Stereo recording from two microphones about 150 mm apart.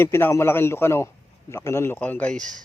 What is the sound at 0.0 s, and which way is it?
A man's voice, 15° left (ahead or behind).